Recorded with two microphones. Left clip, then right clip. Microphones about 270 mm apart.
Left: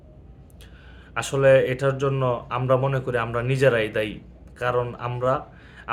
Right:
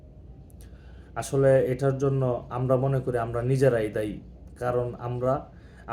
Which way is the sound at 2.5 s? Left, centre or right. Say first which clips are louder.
Left 3 dB; centre.